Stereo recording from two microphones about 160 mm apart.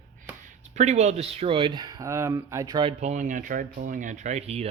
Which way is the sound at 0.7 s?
45° right (ahead or behind).